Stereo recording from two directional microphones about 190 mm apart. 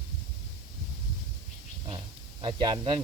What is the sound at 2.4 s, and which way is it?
Speech, 25° right (ahead or behind).